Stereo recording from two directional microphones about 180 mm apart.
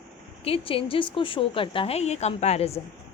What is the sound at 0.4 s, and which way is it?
A woman's voice, 30° left (ahead or behind).